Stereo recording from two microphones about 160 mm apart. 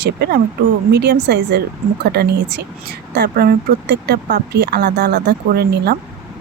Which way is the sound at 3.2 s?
80° right.